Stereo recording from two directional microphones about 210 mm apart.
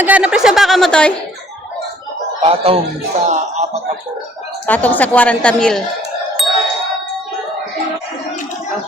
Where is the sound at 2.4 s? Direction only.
25° right (ahead or behind).